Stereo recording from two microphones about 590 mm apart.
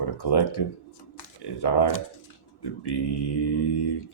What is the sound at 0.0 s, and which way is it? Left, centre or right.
Speech, left.